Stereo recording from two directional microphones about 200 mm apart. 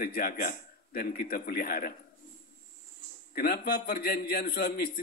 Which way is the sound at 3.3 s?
50° left (ahead or behind).